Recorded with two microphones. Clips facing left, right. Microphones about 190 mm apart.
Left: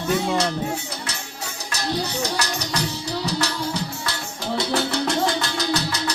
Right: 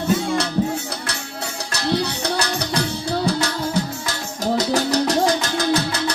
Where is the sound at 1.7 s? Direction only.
65° right (ahead or behind); by 4.1 s 50° right (ahead or behind).